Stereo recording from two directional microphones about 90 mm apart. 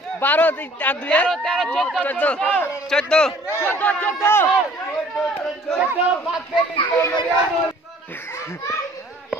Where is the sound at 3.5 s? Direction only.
20° left (ahead or behind).